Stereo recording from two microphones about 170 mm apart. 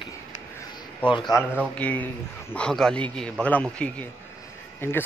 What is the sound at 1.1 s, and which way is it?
Speech, 30° left (ahead or behind).